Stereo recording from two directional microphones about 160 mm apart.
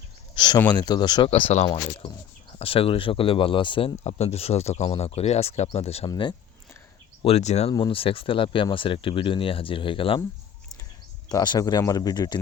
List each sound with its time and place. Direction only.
0.3 s a sound: 30° left (ahead or behind)
0.7 s speech: 25° left (ahead or behind)
1.5 s speech: 35° left (ahead or behind)
6.1 s speech: 30° left (ahead or behind)
7.2 s speech: 40° left (ahead or behind)
7.7 s speech: 30° left (ahead or behind)
11.3 s speech: 25° left (ahead or behind)